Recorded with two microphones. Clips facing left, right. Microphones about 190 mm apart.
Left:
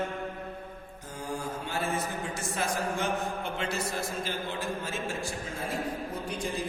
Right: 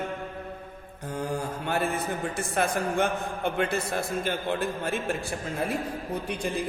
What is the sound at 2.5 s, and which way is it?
A man's voice, 60° right (ahead or behind).